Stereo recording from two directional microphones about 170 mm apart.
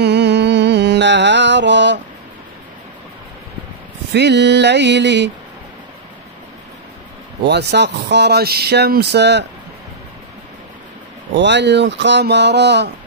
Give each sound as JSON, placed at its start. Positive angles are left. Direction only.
{"t": 0.0, "sound": "music", "side_deg": -85}
{"t": 4.1, "sound": "speech", "side_deg": -85}
{"t": 7.4, "sound": "speech", "side_deg": -80}
{"t": 11.3, "sound": "speech", "side_deg": -90}